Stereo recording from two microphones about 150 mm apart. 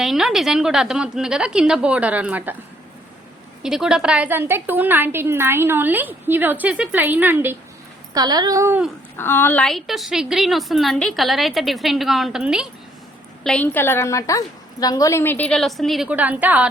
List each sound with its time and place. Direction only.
0.0 s a woman's voice: centre (ahead or behind)
3.6 s a woman's voice: 5° right (ahead or behind)
8.1 s speech: 25° right (ahead or behind)
9.1 s a woman's voice: 15° left (ahead or behind); by 12.6 s 5° right (ahead or behind)
13.4 s a woman's voice: 10° left (ahead or behind); by 16.6 s 10° right (ahead or behind)